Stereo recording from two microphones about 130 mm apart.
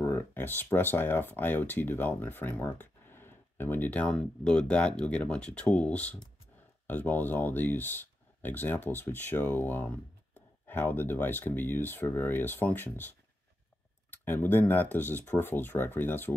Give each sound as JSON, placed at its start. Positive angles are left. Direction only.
{"t": 0.0, "sound": "speech", "side_deg": 20}
{"t": 14.2, "sound": "speech", "side_deg": 15}